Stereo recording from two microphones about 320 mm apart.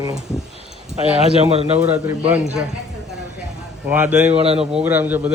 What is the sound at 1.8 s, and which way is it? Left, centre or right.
Speech, centre.